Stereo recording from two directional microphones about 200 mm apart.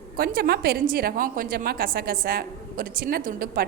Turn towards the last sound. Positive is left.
turn(degrees=-50)  # may be behind; listen again after turning